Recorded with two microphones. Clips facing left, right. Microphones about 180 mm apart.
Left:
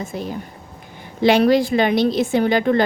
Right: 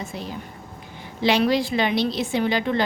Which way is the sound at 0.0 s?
50° left (ahead or behind).